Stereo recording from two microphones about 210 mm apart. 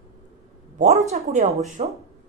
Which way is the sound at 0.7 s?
35° right (ahead or behind).